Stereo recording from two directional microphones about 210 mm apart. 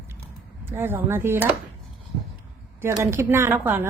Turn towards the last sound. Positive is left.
turn(degrees=-10)  # may be behind; listen again after turning